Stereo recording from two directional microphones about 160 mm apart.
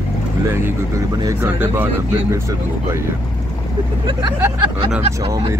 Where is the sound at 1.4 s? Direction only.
15° right (ahead or behind).